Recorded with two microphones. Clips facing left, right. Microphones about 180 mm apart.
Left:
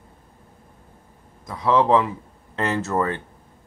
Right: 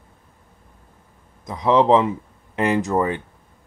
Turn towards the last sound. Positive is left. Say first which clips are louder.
# right 3 dB
turn(degrees=-15)  # may be behind; listen again after turning